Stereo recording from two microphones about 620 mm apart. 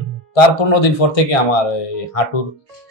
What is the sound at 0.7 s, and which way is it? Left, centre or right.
Speech, left.